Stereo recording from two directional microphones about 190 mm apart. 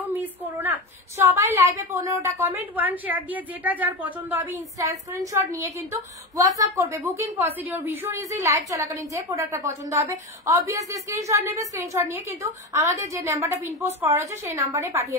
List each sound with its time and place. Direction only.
0.0 s a woman's voice: 10° right (ahead or behind)